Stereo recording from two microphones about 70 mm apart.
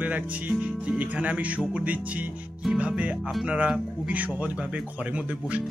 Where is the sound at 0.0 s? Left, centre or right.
Right.